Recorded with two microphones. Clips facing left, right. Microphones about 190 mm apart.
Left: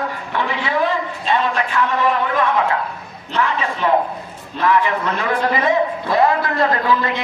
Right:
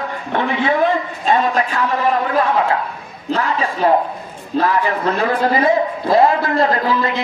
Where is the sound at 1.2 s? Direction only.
40° right (ahead or behind).